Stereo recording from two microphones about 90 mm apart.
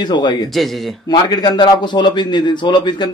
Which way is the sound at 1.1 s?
50° left (ahead or behind).